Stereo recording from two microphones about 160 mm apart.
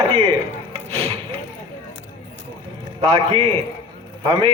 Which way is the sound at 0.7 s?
40° right (ahead or behind).